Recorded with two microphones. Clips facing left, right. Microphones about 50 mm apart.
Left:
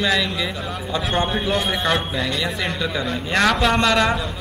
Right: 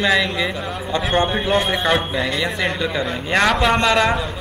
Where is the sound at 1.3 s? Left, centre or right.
Centre.